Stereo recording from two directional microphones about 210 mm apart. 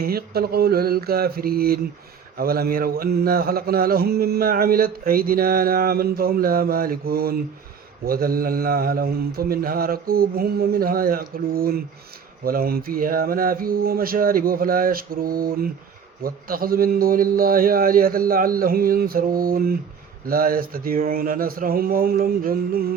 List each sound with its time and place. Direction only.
0.0 s mantra: 45° right (ahead or behind)